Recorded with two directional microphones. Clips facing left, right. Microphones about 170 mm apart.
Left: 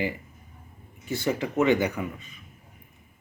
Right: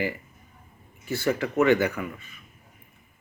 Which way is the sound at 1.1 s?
15° left (ahead or behind).